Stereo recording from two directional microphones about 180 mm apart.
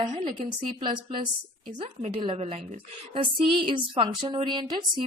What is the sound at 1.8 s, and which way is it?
Speech, 30° right (ahead or behind).